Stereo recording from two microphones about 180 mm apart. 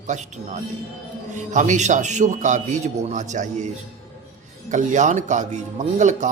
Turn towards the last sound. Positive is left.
turn(degrees=-40)  # may be behind; listen again after turning